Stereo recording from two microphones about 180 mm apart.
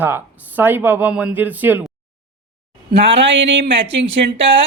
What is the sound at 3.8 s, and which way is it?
Speech, 30° right (ahead or behind).